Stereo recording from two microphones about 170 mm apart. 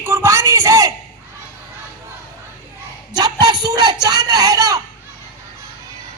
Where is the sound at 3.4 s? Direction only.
25° right (ahead or behind).